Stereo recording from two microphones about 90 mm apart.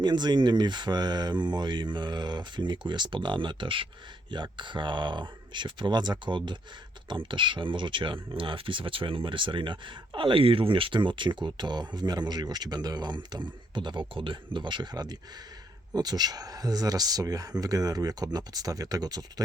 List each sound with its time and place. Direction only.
0.0 s speech: 55° right (ahead or behind)